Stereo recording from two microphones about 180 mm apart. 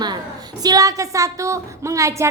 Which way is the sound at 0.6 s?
20° right (ahead or behind).